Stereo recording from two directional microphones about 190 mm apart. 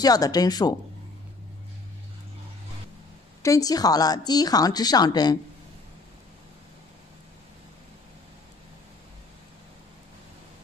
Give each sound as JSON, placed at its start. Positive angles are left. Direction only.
{"t": 0.0, "sound": "speech", "side_deg": 20}
{"t": 3.4, "sound": "speech", "side_deg": 20}